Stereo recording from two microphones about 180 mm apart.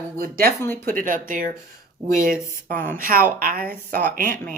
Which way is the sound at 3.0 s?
50° right (ahead or behind).